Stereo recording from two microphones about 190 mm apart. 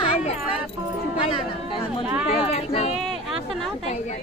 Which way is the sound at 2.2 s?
30° left (ahead or behind).